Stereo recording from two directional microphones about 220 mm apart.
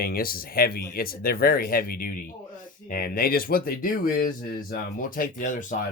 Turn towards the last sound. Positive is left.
turn(degrees=35)  # may be behind; listen again after turning